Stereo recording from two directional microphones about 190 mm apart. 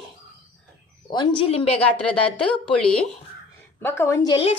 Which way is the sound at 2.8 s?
5° left (ahead or behind).